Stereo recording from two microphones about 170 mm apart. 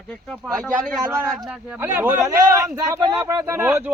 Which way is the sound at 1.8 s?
10° right (ahead or behind).